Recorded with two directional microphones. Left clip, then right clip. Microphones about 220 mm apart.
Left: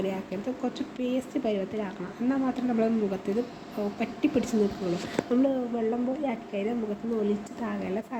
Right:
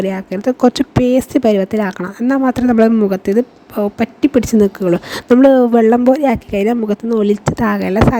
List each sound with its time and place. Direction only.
0.0 s speech: 45° right (ahead or behind)